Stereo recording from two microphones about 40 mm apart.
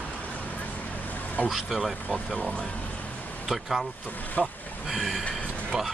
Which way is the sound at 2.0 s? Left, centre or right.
Left.